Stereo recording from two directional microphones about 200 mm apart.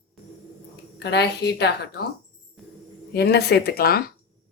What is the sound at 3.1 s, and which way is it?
Speech, 55° left (ahead or behind).